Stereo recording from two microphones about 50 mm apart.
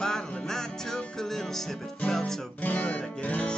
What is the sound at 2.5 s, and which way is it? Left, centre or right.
Music, left.